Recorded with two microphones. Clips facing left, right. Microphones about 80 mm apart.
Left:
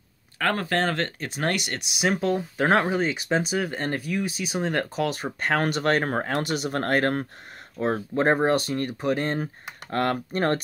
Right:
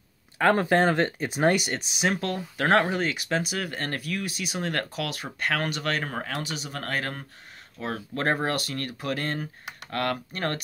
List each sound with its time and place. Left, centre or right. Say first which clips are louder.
0.4 s speech: right 4 dB; centre
1.8 s speech: left 2 dB; centre
5.0 s speech: left 4 dB; left
6.4 s speech: left 8 dB; left
8.1 s speech: left 5 dB; centre